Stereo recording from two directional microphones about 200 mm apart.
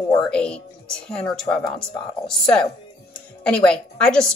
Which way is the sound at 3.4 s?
5° left (ahead or behind).